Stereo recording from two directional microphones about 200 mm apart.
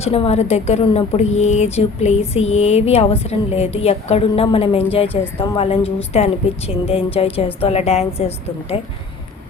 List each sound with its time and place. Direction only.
0.0 s a woman's voice: 30° left (ahead or behind)